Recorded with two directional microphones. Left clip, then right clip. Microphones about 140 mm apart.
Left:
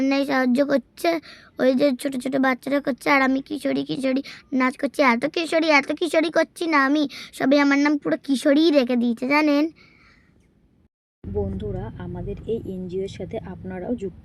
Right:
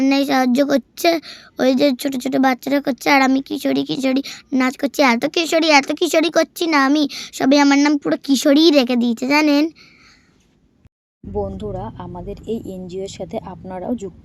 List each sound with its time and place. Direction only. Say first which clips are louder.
0.0 s a woman's voice: right 5 dB; 20° right (ahead or behind)
11.3 s speech: right 4 dB; 40° right (ahead or behind)